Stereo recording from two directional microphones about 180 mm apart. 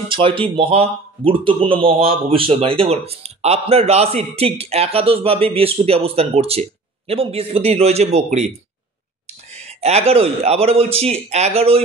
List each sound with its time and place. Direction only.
0.1 s a man's voice: 30° right (ahead or behind)
9.6 s a man's voice: 35° right (ahead or behind)